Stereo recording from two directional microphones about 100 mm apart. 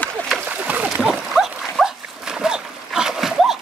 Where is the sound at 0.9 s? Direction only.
Centre (ahead or behind).